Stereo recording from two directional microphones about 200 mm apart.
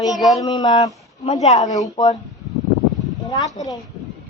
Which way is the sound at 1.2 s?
35° left (ahead or behind).